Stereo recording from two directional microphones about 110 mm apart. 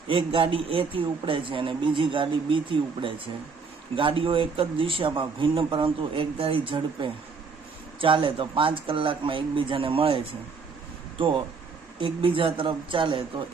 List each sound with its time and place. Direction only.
0.1 s speech: 50° right (ahead or behind)